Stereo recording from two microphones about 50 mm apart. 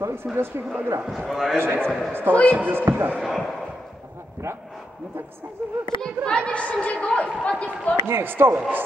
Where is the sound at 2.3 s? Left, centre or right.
Left.